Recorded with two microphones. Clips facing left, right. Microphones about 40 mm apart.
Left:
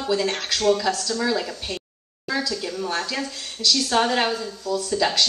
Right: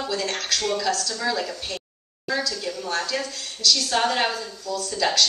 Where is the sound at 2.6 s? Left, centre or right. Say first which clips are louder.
Left 1 dB; centre.